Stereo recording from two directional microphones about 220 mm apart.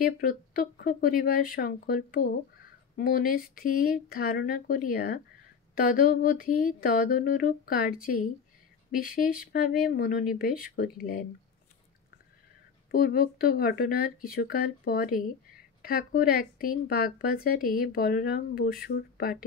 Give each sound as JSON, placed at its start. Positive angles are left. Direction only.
{"t": 0.0, "sound": "speech", "side_deg": 40}
{"t": 9.5, "sound": "speech", "side_deg": 40}
{"t": 12.9, "sound": "a woman's voice", "side_deg": 40}